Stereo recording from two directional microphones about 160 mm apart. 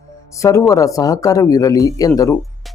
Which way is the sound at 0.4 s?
20° left (ahead or behind).